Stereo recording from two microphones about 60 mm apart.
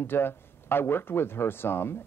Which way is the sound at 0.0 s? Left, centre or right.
Left.